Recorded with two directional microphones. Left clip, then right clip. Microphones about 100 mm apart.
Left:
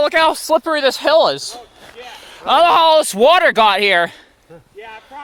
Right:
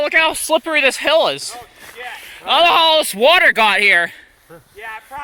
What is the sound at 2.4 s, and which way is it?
Speech, 75° left (ahead or behind).